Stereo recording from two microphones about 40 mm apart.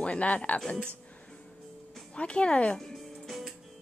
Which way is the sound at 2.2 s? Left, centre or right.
Left.